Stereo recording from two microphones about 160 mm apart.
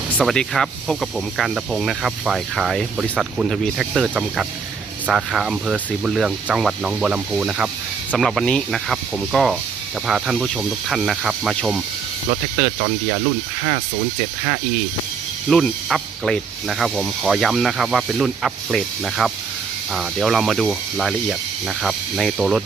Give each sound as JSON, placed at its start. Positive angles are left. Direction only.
{"t": 0.2, "sound": "speech", "side_deg": 5}
{"t": 12.8, "sound": "speech", "side_deg": -25}
{"t": 15.4, "sound": "speech", "side_deg": 0}